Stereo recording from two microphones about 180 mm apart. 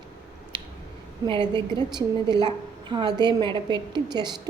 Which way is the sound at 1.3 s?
25° right (ahead or behind).